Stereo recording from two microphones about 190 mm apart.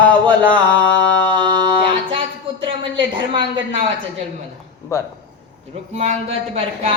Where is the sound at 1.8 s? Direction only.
25° right (ahead or behind).